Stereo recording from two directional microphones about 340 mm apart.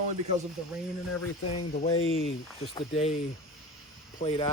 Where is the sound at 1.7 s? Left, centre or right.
Centre.